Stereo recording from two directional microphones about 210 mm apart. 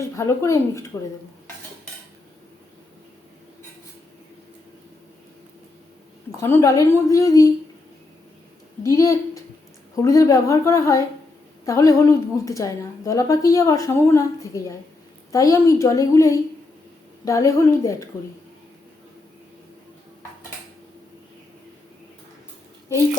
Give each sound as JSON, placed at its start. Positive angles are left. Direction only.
{"t": 0.0, "sound": "a woman's voice", "side_deg": 15}
{"t": 6.3, "sound": "a woman's voice", "side_deg": 10}
{"t": 8.8, "sound": "a woman's voice", "side_deg": 15}